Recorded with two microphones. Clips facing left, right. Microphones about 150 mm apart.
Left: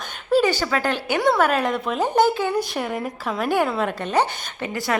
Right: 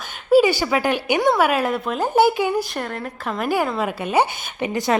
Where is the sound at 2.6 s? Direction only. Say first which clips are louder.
Left 1 dB; centre (ahead or behind).